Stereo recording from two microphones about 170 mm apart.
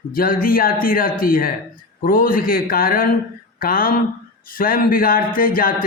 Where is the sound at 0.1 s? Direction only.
55° left (ahead or behind).